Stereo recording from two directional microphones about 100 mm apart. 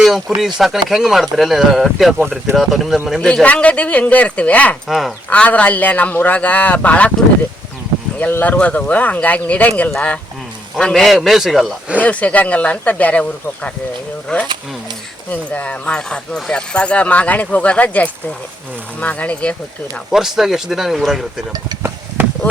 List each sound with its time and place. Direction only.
0.0 s speech: centre (ahead or behind)
3.2 s speech: 10° left (ahead or behind)
4.9 s speech: centre (ahead or behind)
5.3 s speech: 15° left (ahead or behind)
8.2 s speech: 15° left (ahead or behind); by 11.7 s centre (ahead or behind)
12.0 s speech: 15° left (ahead or behind)
20.1 s speech: 5° right (ahead or behind)